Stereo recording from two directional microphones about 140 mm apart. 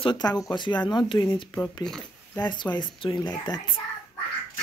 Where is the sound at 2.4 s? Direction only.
30° left (ahead or behind).